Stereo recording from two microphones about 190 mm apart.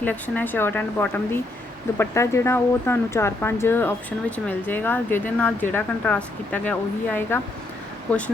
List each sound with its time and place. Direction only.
0.0 s speech: 10° left (ahead or behind)